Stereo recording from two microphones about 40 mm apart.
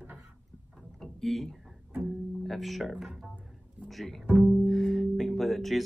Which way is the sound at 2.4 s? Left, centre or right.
Centre.